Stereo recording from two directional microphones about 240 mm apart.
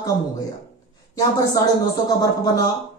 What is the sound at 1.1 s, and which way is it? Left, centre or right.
A woman's voice, centre.